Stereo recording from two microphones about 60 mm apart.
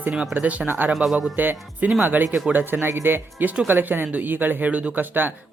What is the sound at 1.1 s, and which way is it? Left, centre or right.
Speech, centre.